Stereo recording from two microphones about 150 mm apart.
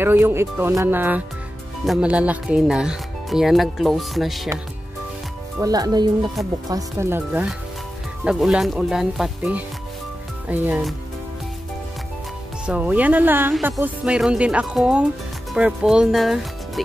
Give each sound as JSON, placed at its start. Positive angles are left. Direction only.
{"t": 0.0, "sound": "speech", "side_deg": -15}
{"t": 5.6, "sound": "speech", "side_deg": -25}
{"t": 8.2, "sound": "speech", "side_deg": -5}
{"t": 12.6, "sound": "speech", "side_deg": -10}